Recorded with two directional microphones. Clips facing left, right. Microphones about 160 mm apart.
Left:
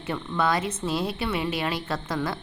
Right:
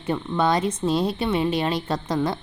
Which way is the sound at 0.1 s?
25° right (ahead or behind).